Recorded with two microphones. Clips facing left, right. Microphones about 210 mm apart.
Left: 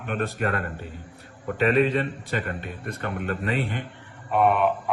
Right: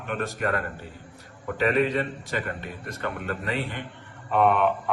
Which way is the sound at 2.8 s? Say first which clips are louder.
Even; 55° left (ahead or behind).